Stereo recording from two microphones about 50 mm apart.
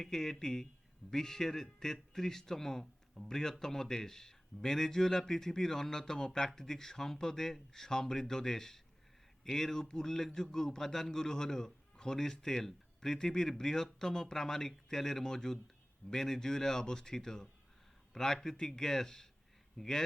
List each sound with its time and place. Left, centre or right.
0.0 s a man's voice: centre